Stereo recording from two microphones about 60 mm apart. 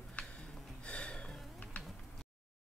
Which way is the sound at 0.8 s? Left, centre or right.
Centre.